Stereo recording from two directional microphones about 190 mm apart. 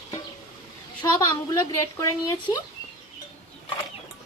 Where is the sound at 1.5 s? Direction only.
15° left (ahead or behind).